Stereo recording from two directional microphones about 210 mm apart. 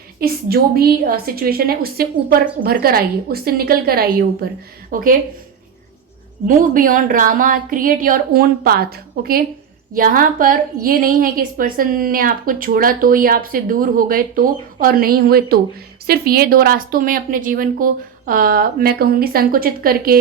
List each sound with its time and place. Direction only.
0.2 s a woman's voice: 45° right (ahead or behind)
6.5 s a woman's voice: 40° right (ahead or behind)